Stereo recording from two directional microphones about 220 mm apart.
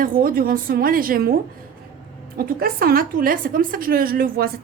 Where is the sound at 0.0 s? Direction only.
40° right (ahead or behind).